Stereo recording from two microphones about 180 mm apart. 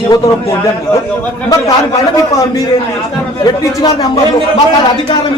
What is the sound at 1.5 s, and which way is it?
Speech, 20° left (ahead or behind).